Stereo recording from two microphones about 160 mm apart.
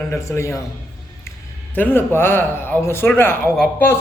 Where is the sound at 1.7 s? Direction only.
10° left (ahead or behind).